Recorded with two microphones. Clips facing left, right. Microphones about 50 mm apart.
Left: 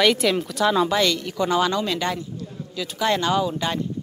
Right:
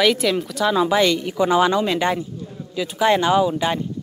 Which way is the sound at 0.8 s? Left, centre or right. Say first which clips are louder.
Right 4 dB; centre.